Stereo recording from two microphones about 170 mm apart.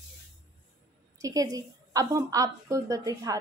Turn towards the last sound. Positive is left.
turn(degrees=-20)  # may be behind; listen again after turning